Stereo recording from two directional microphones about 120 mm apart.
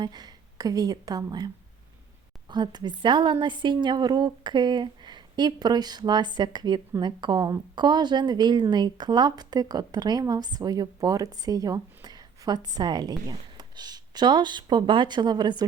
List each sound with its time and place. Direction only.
0.0 s a woman's voice: 35° right (ahead or behind)
2.5 s a woman's voice: 35° right (ahead or behind)